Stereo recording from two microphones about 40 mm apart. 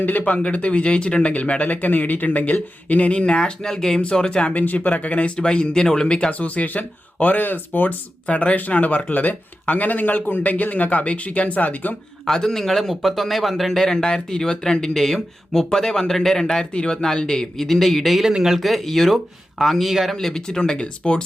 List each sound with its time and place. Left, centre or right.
0.0 s a man's voice: left
0.3 s speech: left
1.3 s speech: left; by 4.0 s centre
4.0 s speech: left
4.6 s speech: left
6.4 s a man's voice: left
8.3 s a man's voice: left
12.2 s a man's voice: centre
13.8 s a man's voice: centre
20.1 s speech: centre